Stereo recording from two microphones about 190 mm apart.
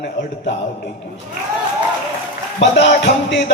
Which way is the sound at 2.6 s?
65° left (ahead or behind).